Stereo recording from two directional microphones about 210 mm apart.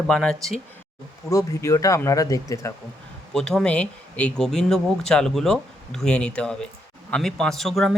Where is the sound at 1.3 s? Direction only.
15° left (ahead or behind).